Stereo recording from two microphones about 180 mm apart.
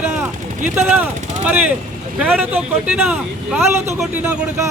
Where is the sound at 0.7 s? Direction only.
10° right (ahead or behind).